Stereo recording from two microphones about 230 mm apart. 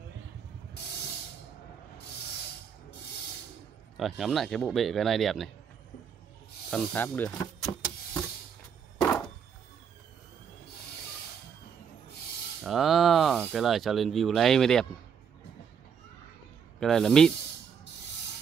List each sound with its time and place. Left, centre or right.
0.8 s music: left
4.2 s speech: centre
6.7 s power windows: centre
9.0 s a sound: centre
12.6 s speech: centre
16.8 s speech: centre